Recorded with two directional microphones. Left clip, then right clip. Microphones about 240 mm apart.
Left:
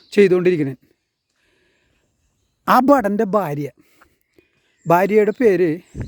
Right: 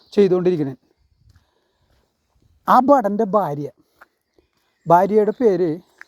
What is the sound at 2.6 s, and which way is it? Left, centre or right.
A man's voice, left.